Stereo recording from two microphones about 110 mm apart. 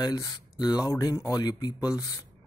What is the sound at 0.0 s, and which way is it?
Speech, 35° left (ahead or behind).